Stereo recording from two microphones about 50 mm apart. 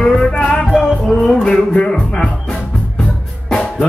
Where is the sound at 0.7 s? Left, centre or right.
Centre.